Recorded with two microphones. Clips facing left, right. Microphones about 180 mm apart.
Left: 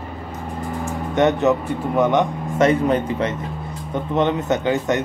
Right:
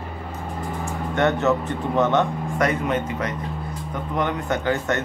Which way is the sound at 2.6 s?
35° left (ahead or behind).